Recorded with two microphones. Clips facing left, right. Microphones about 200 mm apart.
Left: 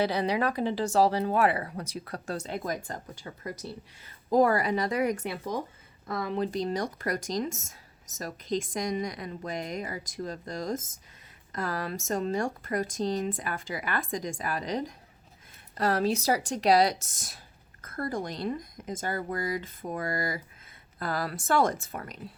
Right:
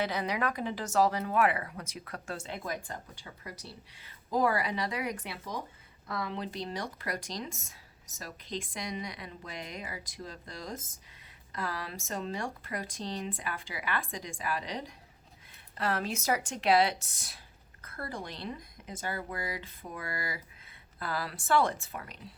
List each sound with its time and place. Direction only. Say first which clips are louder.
0.0 s speech: left 5 dB; 35° left (ahead or behind)